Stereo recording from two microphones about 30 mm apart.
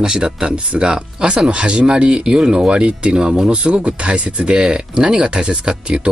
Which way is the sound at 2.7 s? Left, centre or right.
Right.